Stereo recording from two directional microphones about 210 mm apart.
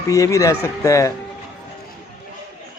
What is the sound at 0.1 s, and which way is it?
Speech, 15° left (ahead or behind).